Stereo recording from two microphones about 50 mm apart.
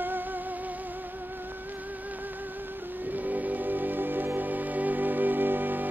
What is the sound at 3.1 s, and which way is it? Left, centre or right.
Music, right.